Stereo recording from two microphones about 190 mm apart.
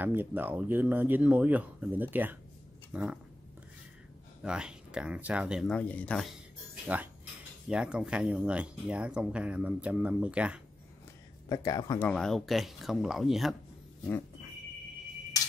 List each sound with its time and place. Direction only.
0.0 s speech: 10° right (ahead or behind)
4.4 s speech: 5° right (ahead or behind)
7.6 s speech: 5° right (ahead or behind)
11.4 s speech: 20° left (ahead or behind)
12.1 s speech: centre (ahead or behind)